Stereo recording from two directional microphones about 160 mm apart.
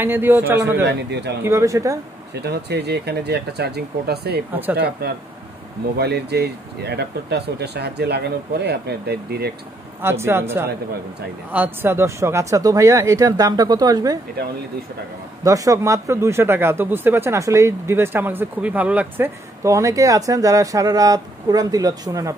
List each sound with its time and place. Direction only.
0.0 s a man's voice: 15° right (ahead or behind)
0.8 s speech: 90° right
1.4 s speech: 20° right (ahead or behind)
2.4 s speech: 90° right
5.0 s speech: 75° right (ahead or behind)
5.9 s speech: 90° right
10.0 s a man's voice: 15° right (ahead or behind)
15.4 s speech: 20° right (ahead or behind)